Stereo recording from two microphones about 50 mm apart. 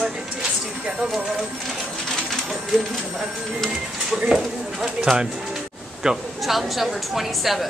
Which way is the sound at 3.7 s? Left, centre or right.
Centre.